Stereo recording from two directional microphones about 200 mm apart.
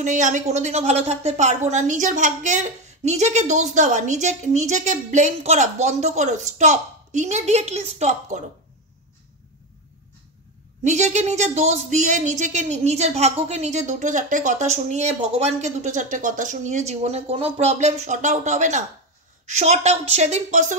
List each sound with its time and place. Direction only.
0.0 s a woman's voice: 40° right (ahead or behind)
10.8 s a woman's voice: 35° right (ahead or behind)